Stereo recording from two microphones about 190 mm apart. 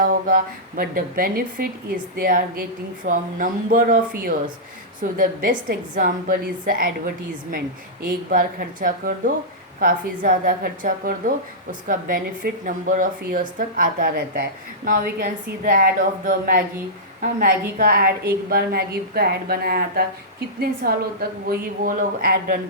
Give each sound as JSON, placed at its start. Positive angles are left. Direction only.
{"t": 0.0, "sound": "speech", "side_deg": -50}